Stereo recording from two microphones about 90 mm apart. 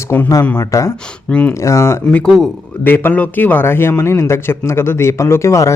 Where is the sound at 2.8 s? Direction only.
20° left (ahead or behind).